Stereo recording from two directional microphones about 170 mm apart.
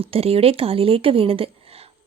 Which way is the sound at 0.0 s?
35° right (ahead or behind).